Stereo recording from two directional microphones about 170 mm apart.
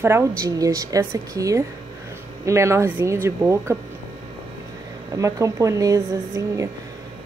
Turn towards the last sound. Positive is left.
turn(degrees=-20)  # may be behind; listen again after turning